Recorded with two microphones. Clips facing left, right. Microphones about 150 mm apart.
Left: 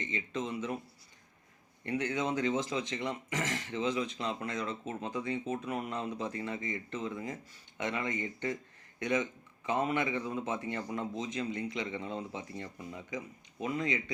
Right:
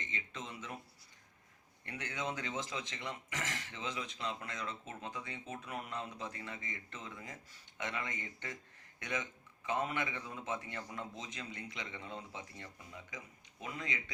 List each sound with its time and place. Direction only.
0.0 s speech: 20° left (ahead or behind)
1.8 s speech: 30° left (ahead or behind)